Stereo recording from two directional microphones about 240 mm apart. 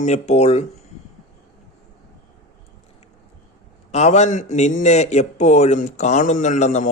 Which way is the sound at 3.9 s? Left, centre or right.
Left.